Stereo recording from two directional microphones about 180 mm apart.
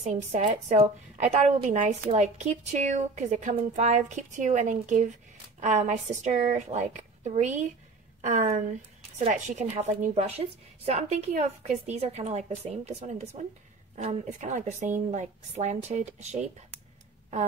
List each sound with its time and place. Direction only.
0.0 s a woman's voice: 40° right (ahead or behind)